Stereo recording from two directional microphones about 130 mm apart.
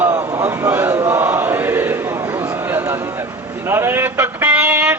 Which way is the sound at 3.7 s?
20° right (ahead or behind).